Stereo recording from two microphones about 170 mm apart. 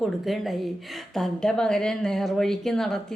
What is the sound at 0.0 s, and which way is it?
A woman's voice, centre (ahead or behind).